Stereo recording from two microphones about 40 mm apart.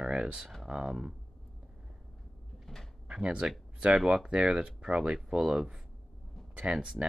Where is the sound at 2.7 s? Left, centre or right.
Centre.